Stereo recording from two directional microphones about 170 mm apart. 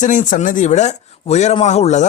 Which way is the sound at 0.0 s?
50° left (ahead or behind).